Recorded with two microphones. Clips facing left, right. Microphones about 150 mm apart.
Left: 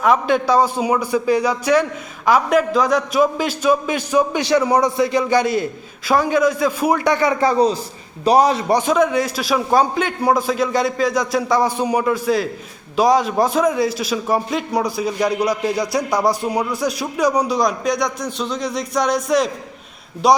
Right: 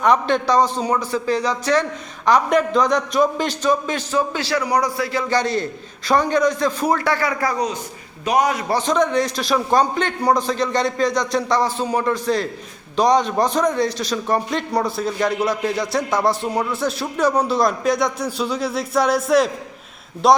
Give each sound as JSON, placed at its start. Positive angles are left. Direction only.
{"t": 0.0, "sound": "a man's voice", "side_deg": 5}
{"t": 8.7, "sound": "a man's voice", "side_deg": 10}
{"t": 15.2, "sound": "a man's voice", "side_deg": 15}
{"t": 17.5, "sound": "a man's voice", "side_deg": 0}